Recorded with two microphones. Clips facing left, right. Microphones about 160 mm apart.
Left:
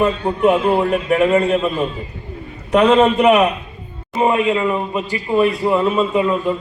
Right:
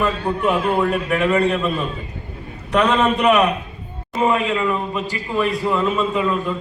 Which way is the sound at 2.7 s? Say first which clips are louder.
Left 5 dB; 45° left (ahead or behind).